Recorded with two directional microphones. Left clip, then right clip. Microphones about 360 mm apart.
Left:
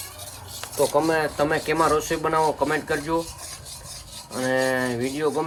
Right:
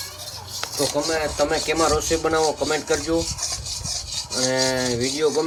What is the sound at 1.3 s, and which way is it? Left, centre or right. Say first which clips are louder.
Rub: right 1 dB; right.